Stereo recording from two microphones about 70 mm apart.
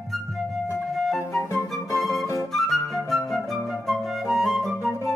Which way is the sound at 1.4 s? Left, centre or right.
Left.